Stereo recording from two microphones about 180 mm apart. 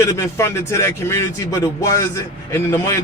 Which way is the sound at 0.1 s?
15° left (ahead or behind).